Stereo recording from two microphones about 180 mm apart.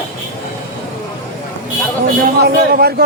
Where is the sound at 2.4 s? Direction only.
60° right (ahead or behind).